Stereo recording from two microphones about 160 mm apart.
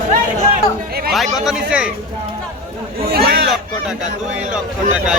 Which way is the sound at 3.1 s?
75° right (ahead or behind).